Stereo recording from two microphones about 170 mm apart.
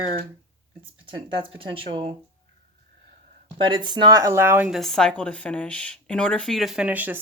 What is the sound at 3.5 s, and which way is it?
Speech, 30° right (ahead or behind).